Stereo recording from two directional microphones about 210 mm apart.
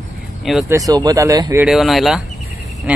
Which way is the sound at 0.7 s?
15° right (ahead or behind).